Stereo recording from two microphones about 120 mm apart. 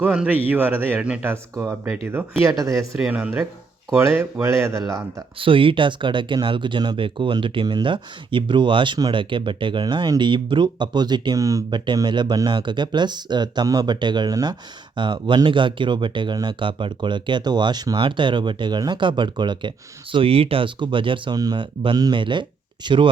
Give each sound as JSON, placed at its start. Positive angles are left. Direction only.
{"t": 0.0, "sound": "a man's voice", "side_deg": -10}
{"t": 1.2, "sound": "speech", "side_deg": -20}
{"t": 3.0, "sound": "a man's voice", "side_deg": -10}
{"t": 5.4, "sound": "speech", "side_deg": -45}
{"t": 11.9, "sound": "speech", "side_deg": -40}